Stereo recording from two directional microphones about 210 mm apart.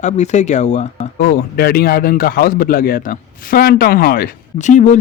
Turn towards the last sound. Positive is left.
turn(degrees=35)  # may be behind; listen again after turning